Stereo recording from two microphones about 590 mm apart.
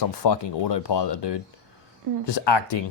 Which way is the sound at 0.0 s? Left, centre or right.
Left.